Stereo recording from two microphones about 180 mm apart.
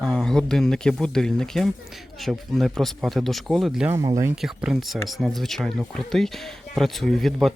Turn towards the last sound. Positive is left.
turn(degrees=0)  # may be behind; listen again after turning